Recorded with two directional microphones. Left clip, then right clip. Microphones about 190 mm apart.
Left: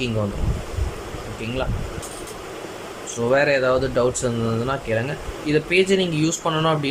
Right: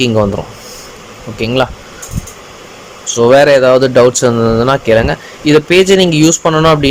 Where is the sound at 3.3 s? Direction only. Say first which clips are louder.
Right 12 dB; 30° right (ahead or behind).